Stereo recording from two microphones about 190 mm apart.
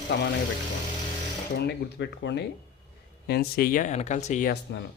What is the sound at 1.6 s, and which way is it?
Speech, 60° left (ahead or behind).